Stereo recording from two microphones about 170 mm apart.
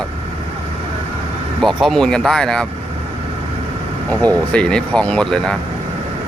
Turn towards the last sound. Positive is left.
turn(degrees=5)  # may be behind; listen again after turning